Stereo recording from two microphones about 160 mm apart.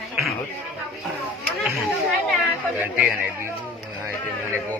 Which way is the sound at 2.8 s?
10° right (ahead or behind).